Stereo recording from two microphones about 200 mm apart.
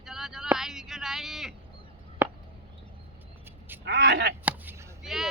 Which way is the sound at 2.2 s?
10° right (ahead or behind).